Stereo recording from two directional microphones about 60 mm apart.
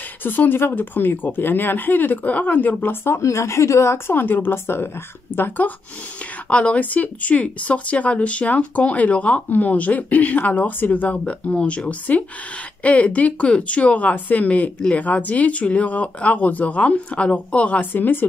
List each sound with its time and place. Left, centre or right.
0.2 s speech: left
3.2 s speech: left
6.5 s speech: left